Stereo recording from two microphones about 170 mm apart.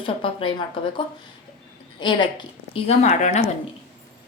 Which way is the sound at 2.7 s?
40° left (ahead or behind).